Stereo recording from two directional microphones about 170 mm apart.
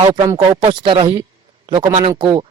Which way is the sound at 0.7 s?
25° right (ahead or behind).